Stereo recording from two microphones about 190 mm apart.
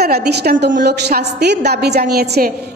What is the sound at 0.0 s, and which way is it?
A woman's voice, 55° right (ahead or behind).